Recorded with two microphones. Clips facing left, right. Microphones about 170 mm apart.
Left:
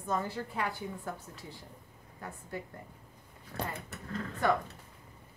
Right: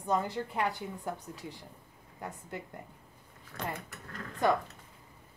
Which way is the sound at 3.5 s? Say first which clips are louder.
Left 2 dB; 25° left (ahead or behind).